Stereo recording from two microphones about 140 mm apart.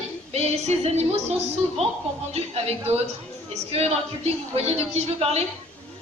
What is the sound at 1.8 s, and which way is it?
A man's voice, 45° right (ahead or behind).